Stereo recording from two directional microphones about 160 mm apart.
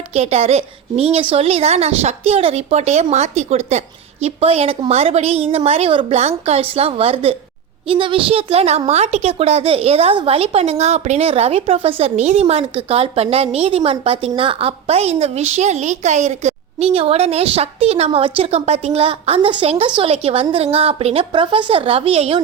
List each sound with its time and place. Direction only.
0.1 s speech: 40° right (ahead or behind)